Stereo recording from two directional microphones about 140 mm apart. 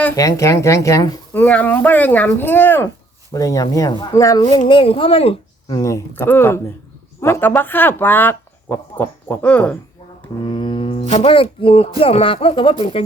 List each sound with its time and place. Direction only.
0.2 s speech: 20° left (ahead or behind)
1.3 s speech: 10° left (ahead or behind)
4.7 s speech: 40° left (ahead or behind)
5.6 s speech: 25° left (ahead or behind); by 9.7 s 10° left (ahead or behind)
10.4 s a sound: 35° left (ahead or behind)
11.1 s speech: 40° left (ahead or behind)